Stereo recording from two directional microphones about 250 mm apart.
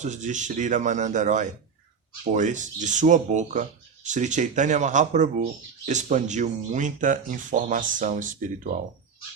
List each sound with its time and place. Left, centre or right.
0.0 s speech: right